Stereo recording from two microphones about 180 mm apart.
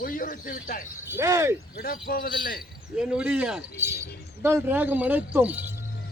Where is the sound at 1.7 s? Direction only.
55° left (ahead or behind).